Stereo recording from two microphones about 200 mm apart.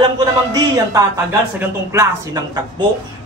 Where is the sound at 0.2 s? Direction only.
20° right (ahead or behind).